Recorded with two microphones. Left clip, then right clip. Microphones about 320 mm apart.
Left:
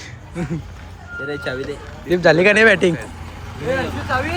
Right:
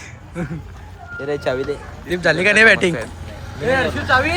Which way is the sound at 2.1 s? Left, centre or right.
Centre.